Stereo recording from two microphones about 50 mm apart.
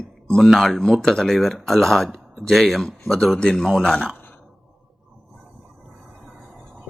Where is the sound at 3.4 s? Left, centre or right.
Centre.